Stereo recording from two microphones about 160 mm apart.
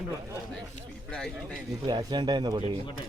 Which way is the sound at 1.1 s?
5° left (ahead or behind).